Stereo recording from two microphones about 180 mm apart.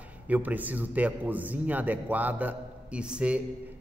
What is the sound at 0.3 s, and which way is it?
A man's voice, 10° right (ahead or behind).